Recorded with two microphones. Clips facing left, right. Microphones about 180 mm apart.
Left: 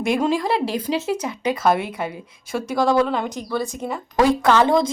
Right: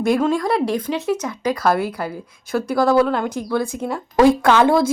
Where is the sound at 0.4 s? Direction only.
25° left (ahead or behind).